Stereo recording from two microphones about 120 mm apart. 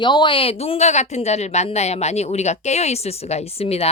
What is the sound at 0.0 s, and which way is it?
A woman's voice, 40° left (ahead or behind).